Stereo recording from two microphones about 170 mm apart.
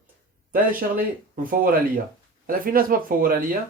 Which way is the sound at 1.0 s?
55° right (ahead or behind).